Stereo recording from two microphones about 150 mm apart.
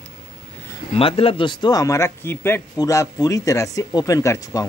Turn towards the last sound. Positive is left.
turn(degrees=20)  # may be behind; listen again after turning